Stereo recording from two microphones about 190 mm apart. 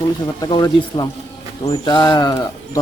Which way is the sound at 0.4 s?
20° left (ahead or behind).